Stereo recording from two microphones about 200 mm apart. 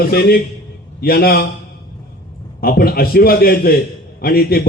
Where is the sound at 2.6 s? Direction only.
50° left (ahead or behind).